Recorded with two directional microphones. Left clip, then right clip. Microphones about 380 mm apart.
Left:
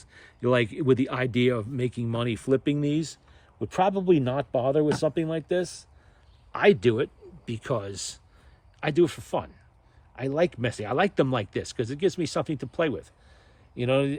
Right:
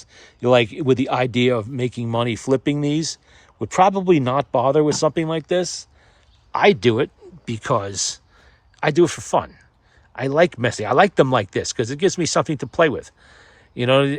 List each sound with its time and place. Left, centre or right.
0.0 s speech: centre